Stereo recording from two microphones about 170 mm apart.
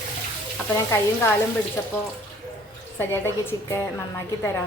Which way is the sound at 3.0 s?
15° left (ahead or behind).